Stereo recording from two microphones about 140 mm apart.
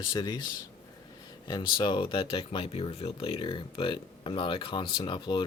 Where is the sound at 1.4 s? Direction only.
30° left (ahead or behind).